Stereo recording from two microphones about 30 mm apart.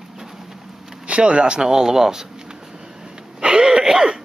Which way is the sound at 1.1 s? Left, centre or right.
Right.